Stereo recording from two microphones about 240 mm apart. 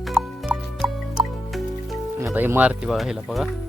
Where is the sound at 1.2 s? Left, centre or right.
Centre.